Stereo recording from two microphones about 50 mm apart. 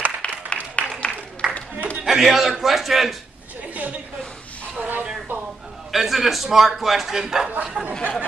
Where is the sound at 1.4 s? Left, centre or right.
Centre.